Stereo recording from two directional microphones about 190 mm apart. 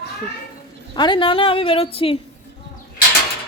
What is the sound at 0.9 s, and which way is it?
Speech, 25° left (ahead or behind).